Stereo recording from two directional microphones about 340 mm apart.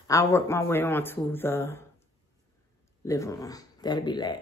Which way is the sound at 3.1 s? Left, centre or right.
Centre.